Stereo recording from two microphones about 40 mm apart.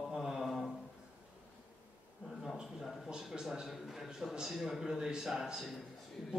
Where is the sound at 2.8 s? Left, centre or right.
Centre.